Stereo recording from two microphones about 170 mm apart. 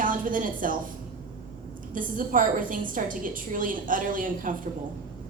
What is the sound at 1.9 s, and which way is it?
A woman's voice, 55° right (ahead or behind).